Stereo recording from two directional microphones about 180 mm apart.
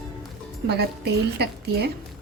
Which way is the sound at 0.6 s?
65° right (ahead or behind).